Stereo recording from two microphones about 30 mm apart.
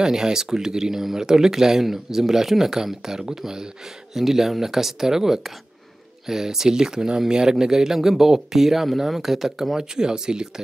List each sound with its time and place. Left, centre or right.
0.0 s speech: right
9.8 s speech: right